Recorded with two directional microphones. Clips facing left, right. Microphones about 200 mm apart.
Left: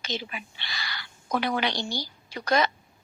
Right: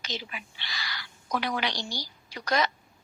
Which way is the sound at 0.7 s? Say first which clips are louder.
Left 1 dB; 25° left (ahead or behind).